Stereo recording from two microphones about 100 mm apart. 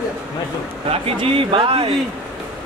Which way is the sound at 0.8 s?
75° right (ahead or behind).